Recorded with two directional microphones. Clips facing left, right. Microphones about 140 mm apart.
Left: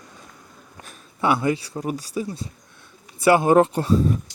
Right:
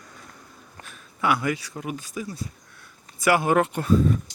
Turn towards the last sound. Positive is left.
turn(degrees=30)  # may be behind; listen again after turning